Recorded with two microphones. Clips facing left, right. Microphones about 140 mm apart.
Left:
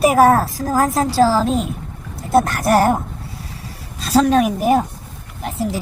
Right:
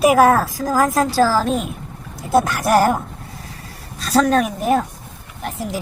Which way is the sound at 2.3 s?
Centre (ahead or behind).